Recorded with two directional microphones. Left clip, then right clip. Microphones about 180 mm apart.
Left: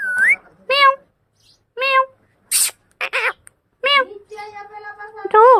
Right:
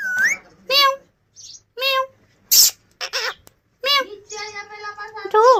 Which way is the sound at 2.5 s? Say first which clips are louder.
Right 7 dB; 30° left (ahead or behind).